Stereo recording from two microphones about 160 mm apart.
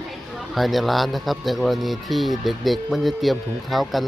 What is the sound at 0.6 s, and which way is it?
Speech, centre (ahead or behind).